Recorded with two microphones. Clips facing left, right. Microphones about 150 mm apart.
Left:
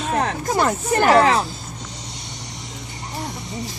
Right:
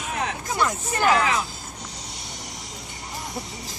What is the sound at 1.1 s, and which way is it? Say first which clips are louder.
Speech: left 6 dB; 35° left (ahead or behind).